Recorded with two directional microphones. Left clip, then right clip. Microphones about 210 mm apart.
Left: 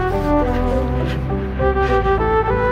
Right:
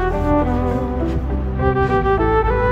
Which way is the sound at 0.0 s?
Centre (ahead or behind).